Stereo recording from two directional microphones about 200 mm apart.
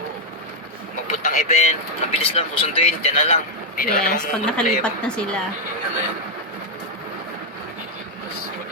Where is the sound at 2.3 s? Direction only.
30° left (ahead or behind).